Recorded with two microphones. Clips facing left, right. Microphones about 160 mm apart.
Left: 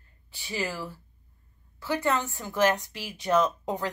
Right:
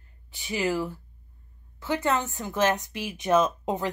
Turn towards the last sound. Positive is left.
turn(degrees=-20)  # may be behind; listen again after turning